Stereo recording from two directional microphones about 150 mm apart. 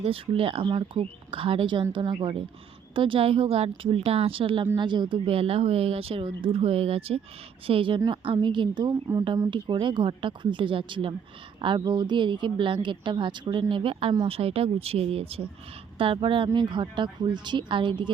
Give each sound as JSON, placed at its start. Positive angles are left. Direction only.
{"t": 0.0, "sound": "speech", "side_deg": -40}